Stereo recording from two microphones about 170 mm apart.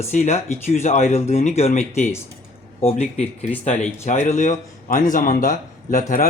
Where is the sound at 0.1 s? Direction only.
40° left (ahead or behind).